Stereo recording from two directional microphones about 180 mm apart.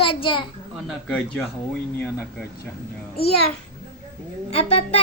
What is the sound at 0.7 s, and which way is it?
Speech, 5° left (ahead or behind).